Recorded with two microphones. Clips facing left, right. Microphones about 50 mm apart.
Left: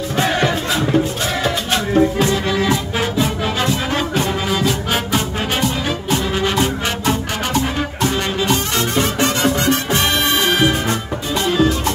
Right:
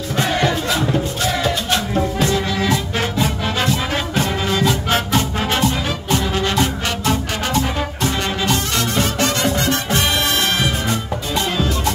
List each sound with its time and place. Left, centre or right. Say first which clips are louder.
2.0 s music: left 6 dB; centre
8.7 s music: left 1 dB; left
11.3 s music: left 5 dB; centre